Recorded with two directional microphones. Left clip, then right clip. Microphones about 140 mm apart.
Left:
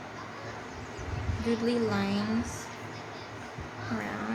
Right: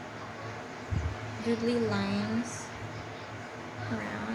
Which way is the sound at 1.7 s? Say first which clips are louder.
Left 1 dB; 20° left (ahead or behind).